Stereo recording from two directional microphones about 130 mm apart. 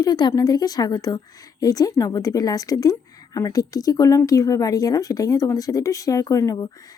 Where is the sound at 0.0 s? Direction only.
30° left (ahead or behind).